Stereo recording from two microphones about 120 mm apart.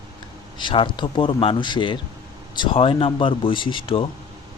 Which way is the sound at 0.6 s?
45° left (ahead or behind).